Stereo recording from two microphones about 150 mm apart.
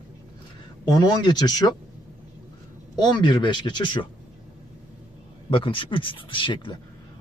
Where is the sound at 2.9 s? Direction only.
30° left (ahead or behind).